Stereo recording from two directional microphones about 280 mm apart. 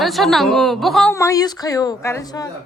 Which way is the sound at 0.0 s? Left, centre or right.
Centre.